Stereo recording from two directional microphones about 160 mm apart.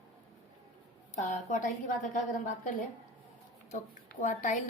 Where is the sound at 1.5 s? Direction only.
55° left (ahead or behind).